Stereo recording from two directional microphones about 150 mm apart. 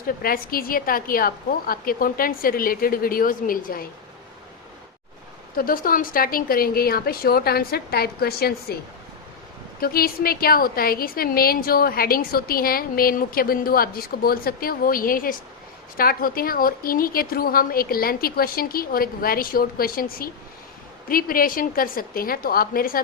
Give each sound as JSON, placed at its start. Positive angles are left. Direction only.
{"t": 0.2, "sound": "a woman's voice", "side_deg": 75}
{"t": 5.5, "sound": "a woman's voice", "side_deg": 70}
{"t": 9.8, "sound": "a woman's voice", "side_deg": 80}